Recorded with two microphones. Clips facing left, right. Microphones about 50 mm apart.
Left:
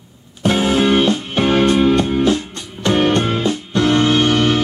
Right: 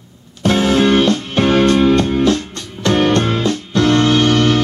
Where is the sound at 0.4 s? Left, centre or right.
Left.